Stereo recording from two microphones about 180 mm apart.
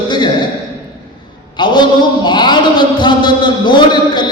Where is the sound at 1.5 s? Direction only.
25° left (ahead or behind).